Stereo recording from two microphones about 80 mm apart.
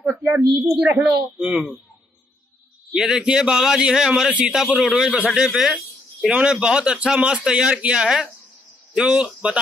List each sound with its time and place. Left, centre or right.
0.3 s a woman's voice: right
0.6 s a woman's voice: centre
2.9 s a man's voice: centre